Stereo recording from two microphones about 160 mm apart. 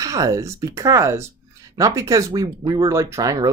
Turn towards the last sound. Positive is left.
turn(degrees=-20)  # may be behind; listen again after turning